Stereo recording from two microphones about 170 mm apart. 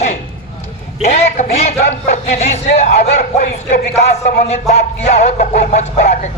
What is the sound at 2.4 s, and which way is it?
Music, 40° left (ahead or behind).